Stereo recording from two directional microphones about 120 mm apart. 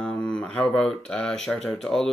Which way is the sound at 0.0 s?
5° left (ahead or behind).